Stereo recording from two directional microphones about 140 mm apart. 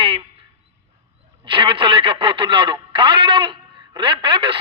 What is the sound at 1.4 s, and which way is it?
A man's voice, 35° right (ahead or behind).